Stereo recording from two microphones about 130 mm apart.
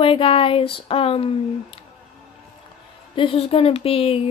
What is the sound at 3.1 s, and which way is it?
Speech, 45° left (ahead or behind).